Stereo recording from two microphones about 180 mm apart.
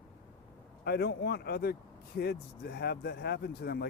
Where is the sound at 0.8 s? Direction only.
65° left (ahead or behind).